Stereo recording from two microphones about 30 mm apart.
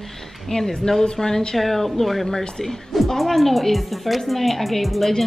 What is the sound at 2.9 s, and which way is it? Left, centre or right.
A woman's voice, centre.